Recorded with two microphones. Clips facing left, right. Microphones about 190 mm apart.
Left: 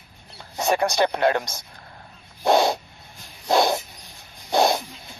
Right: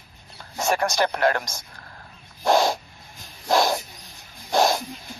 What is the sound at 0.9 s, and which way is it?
Speech, 20° left (ahead or behind).